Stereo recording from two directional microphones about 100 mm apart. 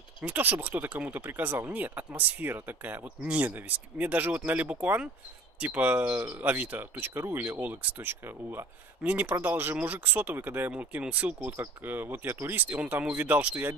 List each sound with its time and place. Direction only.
0.2 s speech: 20° right (ahead or behind)